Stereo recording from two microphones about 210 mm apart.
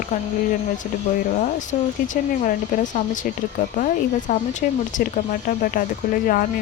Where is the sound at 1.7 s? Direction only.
35° left (ahead or behind).